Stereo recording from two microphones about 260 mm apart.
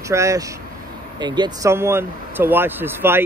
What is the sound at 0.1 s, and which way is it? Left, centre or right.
Speech, centre.